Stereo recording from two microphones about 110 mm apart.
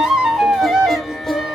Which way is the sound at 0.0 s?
5° right (ahead or behind).